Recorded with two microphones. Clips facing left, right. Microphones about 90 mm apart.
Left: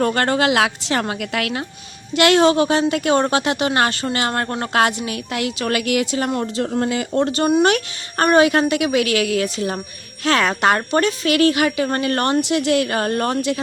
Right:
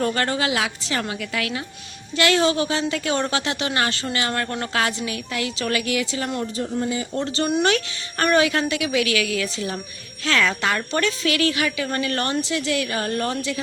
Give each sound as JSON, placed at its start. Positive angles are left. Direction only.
{"t": 0.0, "sound": "a woman's voice", "side_deg": 45}
{"t": 0.9, "sound": "speech", "side_deg": 45}
{"t": 1.2, "sound": "a woman's voice", "side_deg": 60}
{"t": 2.4, "sound": "speech", "side_deg": 45}
{"t": 4.7, "sound": "speech", "side_deg": 50}
{"t": 6.1, "sound": "speech", "side_deg": 40}
{"t": 6.6, "sound": "speech", "side_deg": 65}
{"t": 7.1, "sound": "speech", "side_deg": 50}
{"t": 12.4, "sound": "speech", "side_deg": 65}